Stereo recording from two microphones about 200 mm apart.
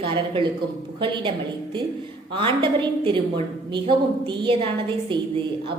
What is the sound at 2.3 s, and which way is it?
A woman's voice, 25° right (ahead or behind).